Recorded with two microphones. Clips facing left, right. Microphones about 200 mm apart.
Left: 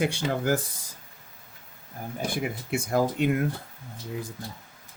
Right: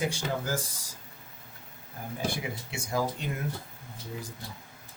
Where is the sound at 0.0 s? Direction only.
60° left (ahead or behind).